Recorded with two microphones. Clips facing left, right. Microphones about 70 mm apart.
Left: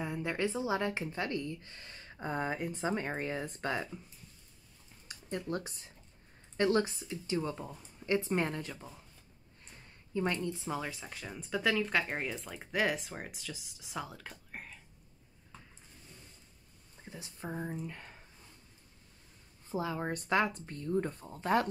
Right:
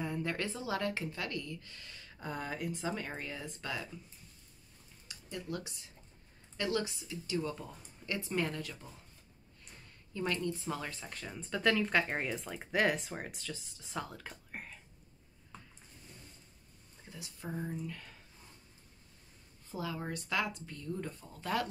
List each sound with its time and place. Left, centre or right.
0.0 s a woman's voice: centre; by 3.8 s left
5.0 s a woman's voice: left
10.1 s a woman's voice: left; by 14.8 s centre
17.1 s a woman's voice: left
19.7 s speech: left